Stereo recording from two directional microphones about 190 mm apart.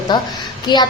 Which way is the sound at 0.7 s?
25° left (ahead or behind).